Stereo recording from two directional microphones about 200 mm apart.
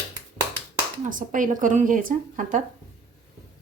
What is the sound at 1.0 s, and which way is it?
Speech, 40° right (ahead or behind).